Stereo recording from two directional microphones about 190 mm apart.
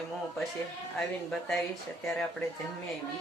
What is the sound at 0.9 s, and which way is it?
Speech, 5° left (ahead or behind).